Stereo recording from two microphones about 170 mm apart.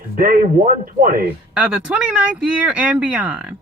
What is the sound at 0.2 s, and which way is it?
Speech, 55° right (ahead or behind).